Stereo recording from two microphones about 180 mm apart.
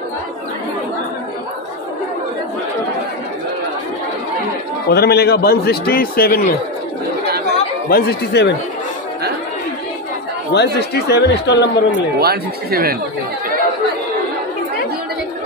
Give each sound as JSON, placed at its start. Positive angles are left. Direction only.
{"t": 4.8, "sound": "a man's voice", "side_deg": 60}
{"t": 7.9, "sound": "speech", "side_deg": 65}
{"t": 10.5, "sound": "speech", "side_deg": 70}
{"t": 12.2, "sound": "speech", "side_deg": -60}